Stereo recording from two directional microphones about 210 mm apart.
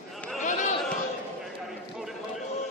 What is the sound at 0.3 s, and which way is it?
Chatter, 35° left (ahead or behind).